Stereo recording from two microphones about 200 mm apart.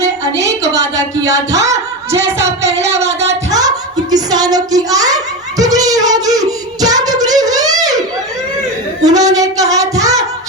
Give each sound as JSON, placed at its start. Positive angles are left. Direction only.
{"t": 0.7, "sound": "a sound", "side_deg": -15}
{"t": 2.1, "sound": "singing", "side_deg": -15}
{"t": 2.6, "sound": "speech", "side_deg": -35}
{"t": 3.0, "sound": "singing", "side_deg": -30}
{"t": 3.5, "sound": "a sound", "side_deg": -20}
{"t": 9.0, "sound": "child singing", "side_deg": -15}